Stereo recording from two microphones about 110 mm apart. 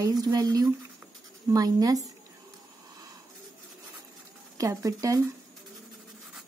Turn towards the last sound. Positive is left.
turn(degrees=-30)  # may be behind; listen again after turning